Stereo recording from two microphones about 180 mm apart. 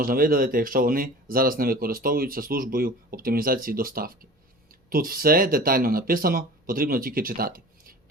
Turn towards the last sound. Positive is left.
turn(degrees=-55)  # may be behind; listen again after turning